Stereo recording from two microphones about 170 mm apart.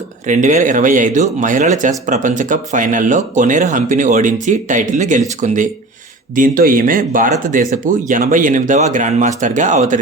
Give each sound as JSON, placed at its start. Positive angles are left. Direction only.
{"t": 0.3, "sound": "speech", "side_deg": -45}